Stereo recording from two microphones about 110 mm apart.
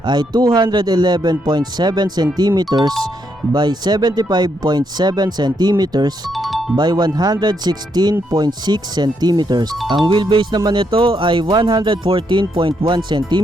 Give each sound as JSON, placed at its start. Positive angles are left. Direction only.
{"t": 0.0, "sound": "speech", "side_deg": -40}
{"t": 6.3, "sound": "music", "side_deg": 0}
{"t": 6.7, "sound": "speech", "side_deg": -40}